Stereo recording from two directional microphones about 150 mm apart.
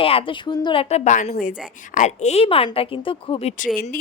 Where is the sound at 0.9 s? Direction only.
50° left (ahead or behind).